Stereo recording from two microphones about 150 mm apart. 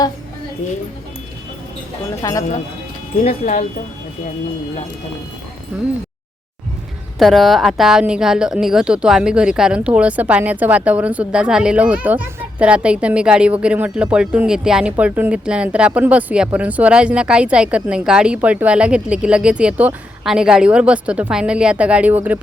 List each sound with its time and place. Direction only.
0.6 s speech: 55° left (ahead or behind)
2.2 s speech: 20° left (ahead or behind)
3.2 s speech: 55° left (ahead or behind)
7.2 s a woman's voice: centre (ahead or behind)